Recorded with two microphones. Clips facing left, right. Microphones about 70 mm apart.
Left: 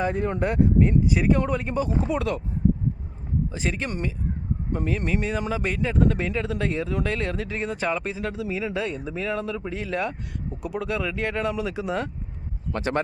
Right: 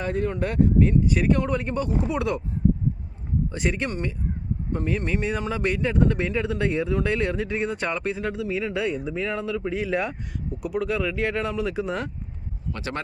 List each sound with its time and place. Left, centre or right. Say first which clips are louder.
0.0 s speech: left 1 dB; centre
3.5 s speech: right 2 dB; centre
12.7 s speech: left 6 dB; left